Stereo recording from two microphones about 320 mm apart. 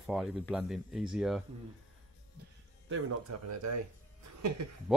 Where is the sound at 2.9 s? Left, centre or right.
Right.